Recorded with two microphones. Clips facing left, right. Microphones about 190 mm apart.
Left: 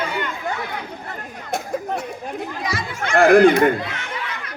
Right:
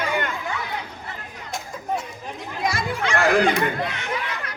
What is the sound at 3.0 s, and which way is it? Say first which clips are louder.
Speech: left 8 dB; 55° left (ahead or behind).